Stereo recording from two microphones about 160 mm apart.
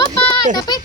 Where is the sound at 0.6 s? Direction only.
25° left (ahead or behind).